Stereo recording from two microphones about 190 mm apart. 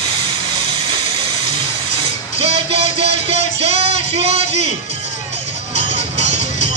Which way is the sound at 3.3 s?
35° right (ahead or behind).